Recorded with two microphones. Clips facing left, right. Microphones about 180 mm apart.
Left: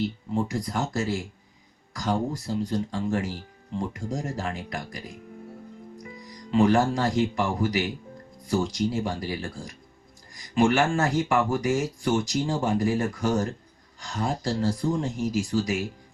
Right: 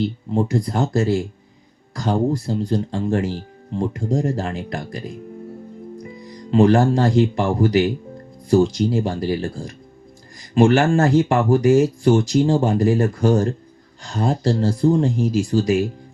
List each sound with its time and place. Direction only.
0.3 s speech: 30° right (ahead or behind)
10.5 s speech: 25° right (ahead or behind)